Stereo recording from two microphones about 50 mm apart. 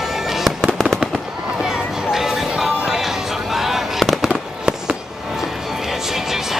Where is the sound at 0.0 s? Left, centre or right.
Centre.